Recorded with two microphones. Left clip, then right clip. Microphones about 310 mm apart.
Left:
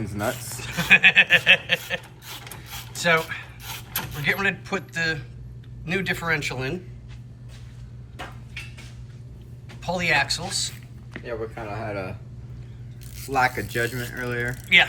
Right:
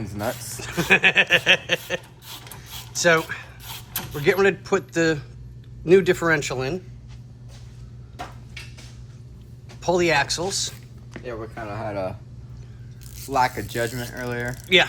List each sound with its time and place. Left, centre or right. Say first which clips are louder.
0.0 s speech: left 1 dB; centre
9.6 s a sound: right 4 dB; centre
11.5 s speech: right 2 dB; right
13.3 s speech: even; right